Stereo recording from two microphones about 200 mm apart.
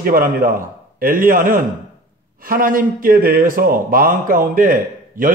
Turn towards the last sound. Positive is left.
turn(degrees=-45)  # may be behind; listen again after turning